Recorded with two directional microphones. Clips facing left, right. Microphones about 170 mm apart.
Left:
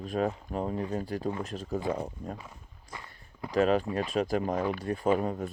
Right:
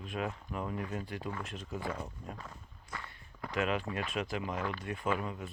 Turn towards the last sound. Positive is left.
turn(degrees=40)  # may be behind; listen again after turning